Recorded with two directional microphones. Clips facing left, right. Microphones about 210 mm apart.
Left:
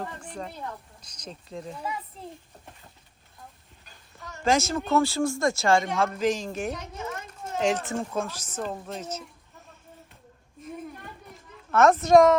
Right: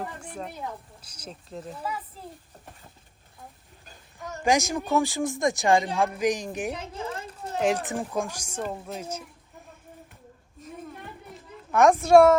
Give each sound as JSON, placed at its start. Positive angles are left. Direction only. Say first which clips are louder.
{"t": 0.0, "sound": "speech", "louder": "even", "side_deg": -10}
{"t": 3.8, "sound": "a sound", "louder": "right 6 dB", "side_deg": -45}
{"t": 4.4, "sound": "speech", "louder": "even", "side_deg": -15}
{"t": 6.7, "sound": "a sound", "louder": "right 2 dB", "side_deg": -30}
{"t": 7.6, "sound": "speech", "louder": "right 1 dB", "side_deg": -10}
{"t": 11.7, "sound": "speech", "louder": "right 1 dB", "side_deg": -15}